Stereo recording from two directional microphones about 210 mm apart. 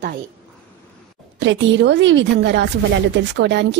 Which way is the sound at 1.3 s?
60° right (ahead or behind).